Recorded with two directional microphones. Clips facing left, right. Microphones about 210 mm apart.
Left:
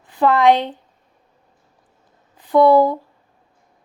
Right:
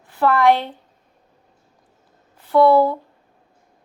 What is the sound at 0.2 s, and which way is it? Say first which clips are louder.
Speech: left 2 dB; 20° left (ahead or behind).